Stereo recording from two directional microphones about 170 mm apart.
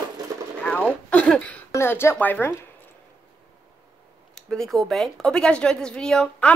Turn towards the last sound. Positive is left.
turn(degrees=5)  # may be behind; listen again after turning